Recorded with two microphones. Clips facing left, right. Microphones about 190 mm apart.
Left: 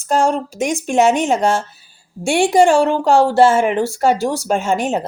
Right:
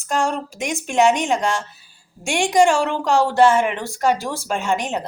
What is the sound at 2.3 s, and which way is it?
A woman's voice, 35° left (ahead or behind).